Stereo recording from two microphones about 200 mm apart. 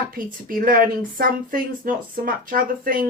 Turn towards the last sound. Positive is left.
turn(degrees=-45)  # may be behind; listen again after turning